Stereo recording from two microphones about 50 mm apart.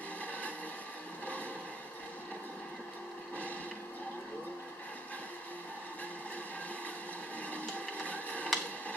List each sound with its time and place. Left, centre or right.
0.2 s vehicle: left
7.5 s printer: left